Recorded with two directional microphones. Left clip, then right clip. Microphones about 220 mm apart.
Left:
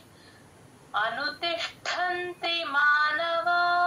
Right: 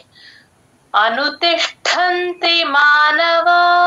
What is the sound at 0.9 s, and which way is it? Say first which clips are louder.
A woman's voice: right 14 dB; 45° right (ahead or behind).